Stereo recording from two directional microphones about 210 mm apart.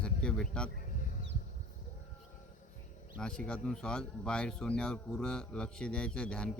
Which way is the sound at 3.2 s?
5° left (ahead or behind).